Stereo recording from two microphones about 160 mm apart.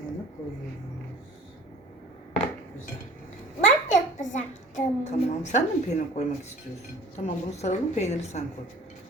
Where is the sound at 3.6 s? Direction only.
50° left (ahead or behind).